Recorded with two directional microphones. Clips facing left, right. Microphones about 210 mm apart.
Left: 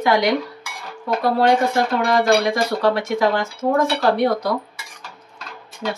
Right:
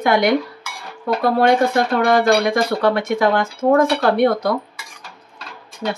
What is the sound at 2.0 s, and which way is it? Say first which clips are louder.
Speech: right 2 dB; 55° right (ahead or behind).